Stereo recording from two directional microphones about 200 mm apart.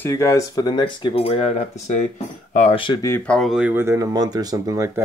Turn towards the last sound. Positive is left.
turn(degrees=-15)  # may be behind; listen again after turning